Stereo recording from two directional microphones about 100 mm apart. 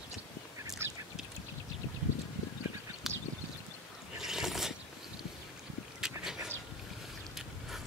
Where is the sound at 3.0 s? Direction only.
Centre (ahead or behind).